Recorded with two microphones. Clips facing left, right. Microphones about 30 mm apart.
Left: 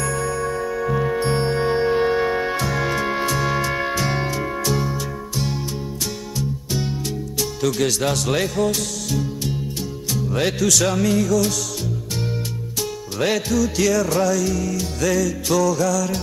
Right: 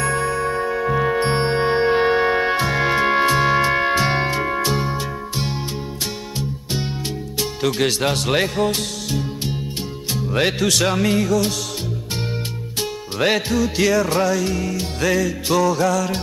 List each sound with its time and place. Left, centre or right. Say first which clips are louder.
0.0 s music: right 3 dB; right
7.3 s speech: right 1 dB; right
10.1 s music: right 2 dB; right
13.2 s music: right 1 dB; right